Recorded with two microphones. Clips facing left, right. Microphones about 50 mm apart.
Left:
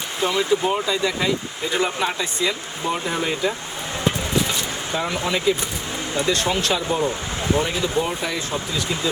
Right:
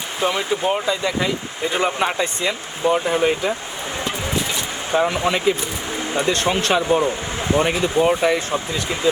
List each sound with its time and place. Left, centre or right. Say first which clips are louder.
0.2 s speech: left 1 dB; right
2.5 s speech: right 5 dB; centre
4.9 s speech: right 6 dB; right